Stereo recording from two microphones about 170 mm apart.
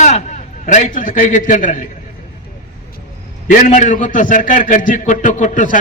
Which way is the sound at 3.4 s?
50° left (ahead or behind).